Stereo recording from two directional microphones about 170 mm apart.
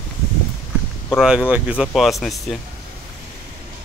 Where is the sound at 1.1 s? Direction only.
5° right (ahead or behind).